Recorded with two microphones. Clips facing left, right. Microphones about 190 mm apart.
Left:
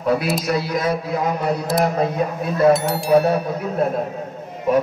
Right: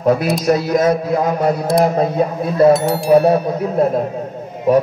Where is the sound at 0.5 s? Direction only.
45° right (ahead or behind).